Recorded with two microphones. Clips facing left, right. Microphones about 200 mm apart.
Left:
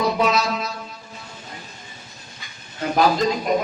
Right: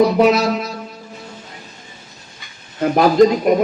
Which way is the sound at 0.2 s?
60° right (ahead or behind).